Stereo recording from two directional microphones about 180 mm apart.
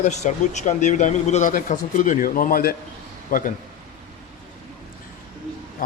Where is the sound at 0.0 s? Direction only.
40° left (ahead or behind).